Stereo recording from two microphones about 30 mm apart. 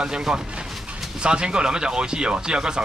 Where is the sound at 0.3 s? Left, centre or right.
Centre.